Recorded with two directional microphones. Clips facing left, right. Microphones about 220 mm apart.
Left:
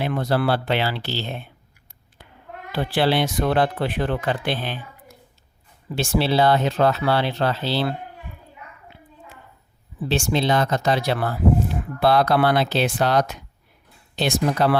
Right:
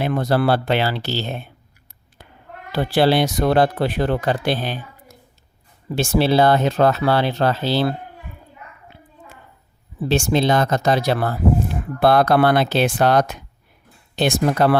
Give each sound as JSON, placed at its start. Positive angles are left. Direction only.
{"t": 0.0, "sound": "speech", "side_deg": -45}
{"t": 2.7, "sound": "speech", "side_deg": -40}
{"t": 10.0, "sound": "speech", "side_deg": -45}